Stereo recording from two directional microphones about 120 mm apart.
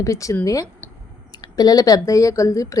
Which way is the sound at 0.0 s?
25° left (ahead or behind).